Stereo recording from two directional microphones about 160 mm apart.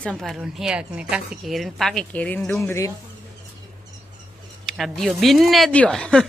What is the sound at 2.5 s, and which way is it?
Speech, 15° left (ahead or behind).